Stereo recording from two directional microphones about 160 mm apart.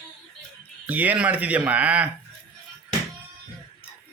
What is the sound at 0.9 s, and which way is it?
Speech, 10° right (ahead or behind).